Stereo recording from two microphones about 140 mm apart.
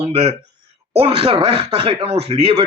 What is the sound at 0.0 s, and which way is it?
Speech, 45° right (ahead or behind).